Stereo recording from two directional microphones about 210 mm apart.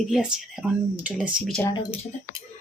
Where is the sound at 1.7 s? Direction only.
20° left (ahead or behind).